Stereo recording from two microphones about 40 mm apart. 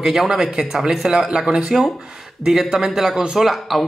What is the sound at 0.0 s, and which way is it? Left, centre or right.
Speech, centre.